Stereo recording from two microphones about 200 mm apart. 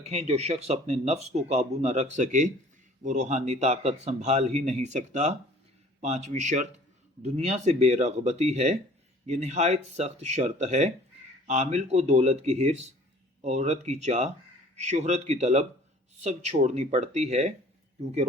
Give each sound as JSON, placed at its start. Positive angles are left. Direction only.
{"t": 0.0, "sound": "speech", "side_deg": -30}